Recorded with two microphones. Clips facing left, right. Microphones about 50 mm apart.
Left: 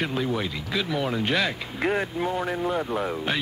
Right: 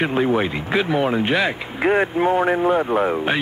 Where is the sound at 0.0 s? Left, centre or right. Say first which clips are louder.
Right 8 dB; right.